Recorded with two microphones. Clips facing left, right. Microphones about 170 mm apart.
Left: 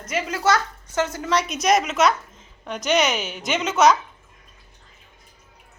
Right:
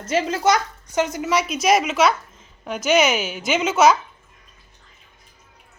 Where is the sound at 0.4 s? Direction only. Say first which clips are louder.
Right 2 dB; 15° right (ahead or behind).